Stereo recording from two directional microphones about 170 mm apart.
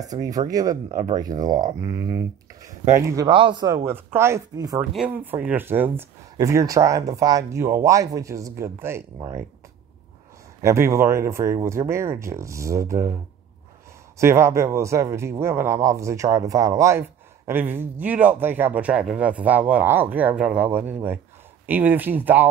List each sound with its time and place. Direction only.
0.0 s speech: 20° right (ahead or behind)
4.9 s speech: 10° right (ahead or behind)
10.6 s speech: 15° right (ahead or behind)
14.1 s speech: 15° right (ahead or behind)